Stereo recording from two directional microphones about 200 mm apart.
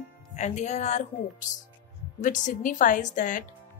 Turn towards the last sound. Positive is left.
turn(degrees=40)  # may be behind; listen again after turning